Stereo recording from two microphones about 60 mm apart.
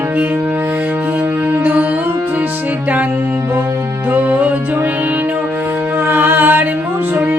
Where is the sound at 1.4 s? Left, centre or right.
Right.